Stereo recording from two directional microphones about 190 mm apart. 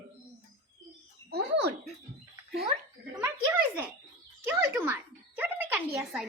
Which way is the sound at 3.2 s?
10° right (ahead or behind).